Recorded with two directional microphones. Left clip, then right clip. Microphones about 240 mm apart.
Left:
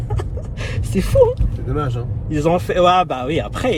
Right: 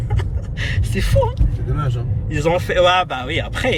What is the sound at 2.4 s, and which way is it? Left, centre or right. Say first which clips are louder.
A man's voice: even; centre.